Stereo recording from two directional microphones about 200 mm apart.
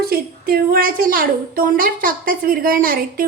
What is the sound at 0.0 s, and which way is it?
A woman's voice, 50° right (ahead or behind).